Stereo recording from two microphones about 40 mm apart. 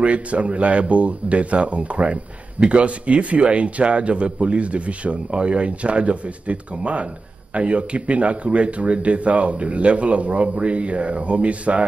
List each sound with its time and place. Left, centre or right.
0.0 s a man's voice: right